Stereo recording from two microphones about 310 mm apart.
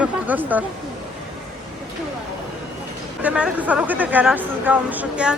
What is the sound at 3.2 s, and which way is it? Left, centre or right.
Speech, centre.